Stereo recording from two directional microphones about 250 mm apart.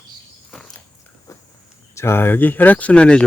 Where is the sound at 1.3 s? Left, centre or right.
Centre.